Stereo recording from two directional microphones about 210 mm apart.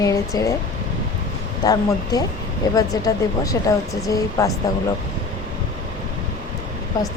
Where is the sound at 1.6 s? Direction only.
15° left (ahead or behind).